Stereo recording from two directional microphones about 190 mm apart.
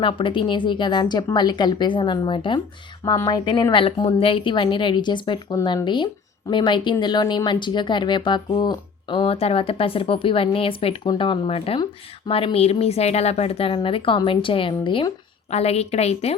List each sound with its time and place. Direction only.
0.0 s a woman's voice: 25° left (ahead or behind)